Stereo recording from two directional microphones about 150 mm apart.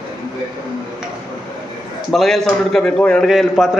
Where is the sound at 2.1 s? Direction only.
Centre (ahead or behind).